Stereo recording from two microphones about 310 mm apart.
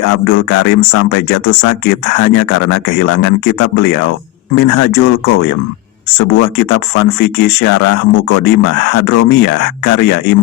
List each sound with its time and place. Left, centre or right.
0.1 s speech: left